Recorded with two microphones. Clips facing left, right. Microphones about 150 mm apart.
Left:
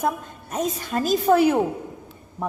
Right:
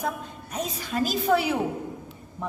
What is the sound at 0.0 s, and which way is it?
A woman's voice, 50° left (ahead or behind).